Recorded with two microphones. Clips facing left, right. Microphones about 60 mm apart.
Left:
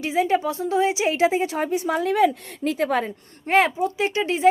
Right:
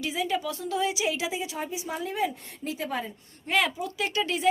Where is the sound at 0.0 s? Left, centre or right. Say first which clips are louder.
Left 8 dB; left.